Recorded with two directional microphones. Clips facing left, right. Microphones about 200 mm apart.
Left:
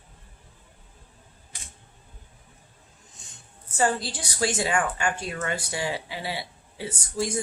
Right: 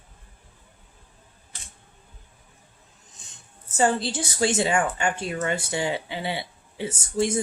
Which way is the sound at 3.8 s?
25° right (ahead or behind).